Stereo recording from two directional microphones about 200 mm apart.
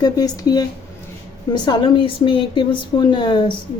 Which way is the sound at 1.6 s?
25° left (ahead or behind).